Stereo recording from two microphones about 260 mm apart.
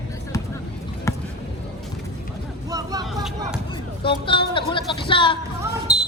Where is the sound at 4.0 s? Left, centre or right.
Centre.